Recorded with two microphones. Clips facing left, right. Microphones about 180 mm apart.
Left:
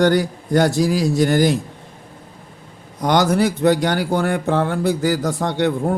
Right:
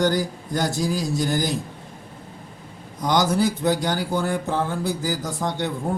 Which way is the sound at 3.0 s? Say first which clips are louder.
Left 4 dB; 65° left (ahead or behind).